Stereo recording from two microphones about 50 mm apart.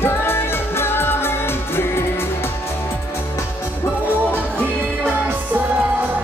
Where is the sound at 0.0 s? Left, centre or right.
Left.